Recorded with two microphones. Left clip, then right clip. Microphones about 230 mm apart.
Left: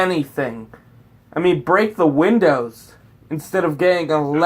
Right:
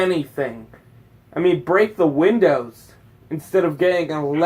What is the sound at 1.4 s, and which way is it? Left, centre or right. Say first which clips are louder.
Speech: left 1 dB; left.